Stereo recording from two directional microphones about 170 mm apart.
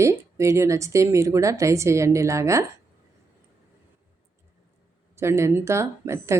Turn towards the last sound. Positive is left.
turn(degrees=-15)  # may be behind; listen again after turning